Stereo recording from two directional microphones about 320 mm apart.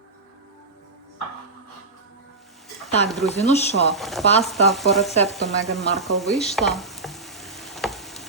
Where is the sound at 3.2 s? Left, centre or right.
Centre.